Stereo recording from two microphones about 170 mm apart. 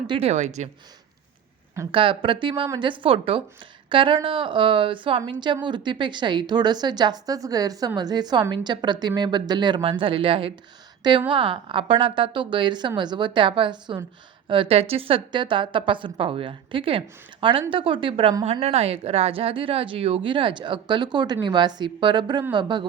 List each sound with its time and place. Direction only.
0.1 s a woman's voice: 35° right (ahead or behind)
1.9 s a woman's voice: 30° right (ahead or behind)